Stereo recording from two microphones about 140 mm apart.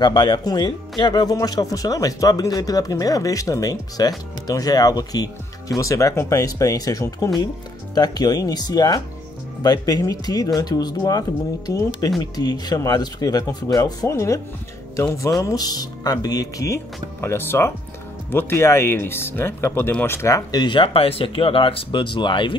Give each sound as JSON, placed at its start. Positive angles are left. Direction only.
{"t": 0.0, "sound": "speech", "side_deg": 30}
{"t": 15.4, "sound": "speech", "side_deg": 25}